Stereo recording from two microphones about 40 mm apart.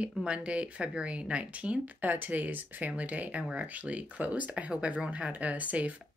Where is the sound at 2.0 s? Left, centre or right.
Right.